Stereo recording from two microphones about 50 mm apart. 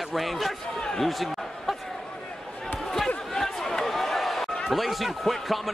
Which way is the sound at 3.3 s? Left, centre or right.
Centre.